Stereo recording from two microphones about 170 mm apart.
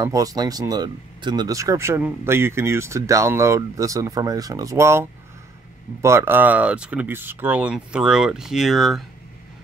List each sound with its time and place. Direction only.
0.0 s speech: 20° right (ahead or behind); by 9.0 s centre (ahead or behind)